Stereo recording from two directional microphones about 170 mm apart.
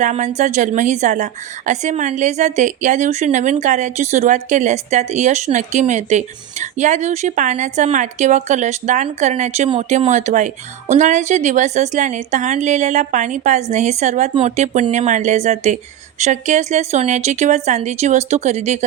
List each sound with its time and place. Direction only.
0.0 s a woman's voice: 45° right (ahead or behind)